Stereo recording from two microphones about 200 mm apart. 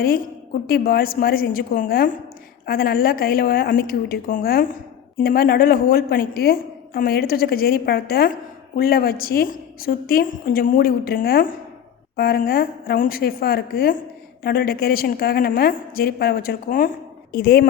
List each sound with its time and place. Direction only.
0.7 s a woman's voice: 50° left (ahead or behind)